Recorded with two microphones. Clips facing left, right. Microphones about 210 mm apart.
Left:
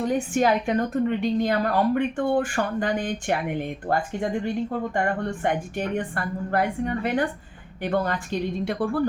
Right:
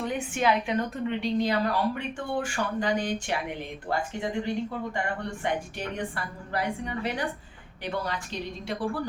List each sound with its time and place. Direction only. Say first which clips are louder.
0.0 s a woman's voice: left 5 dB; 45° left (ahead or behind)